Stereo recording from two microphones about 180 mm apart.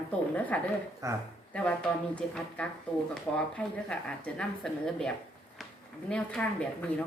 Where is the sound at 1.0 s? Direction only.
20° right (ahead or behind).